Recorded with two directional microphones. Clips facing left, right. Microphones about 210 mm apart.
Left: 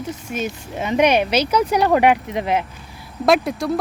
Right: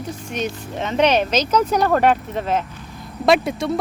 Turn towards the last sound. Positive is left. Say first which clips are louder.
# even
turn(degrees=0)  # may be behind; listen again after turning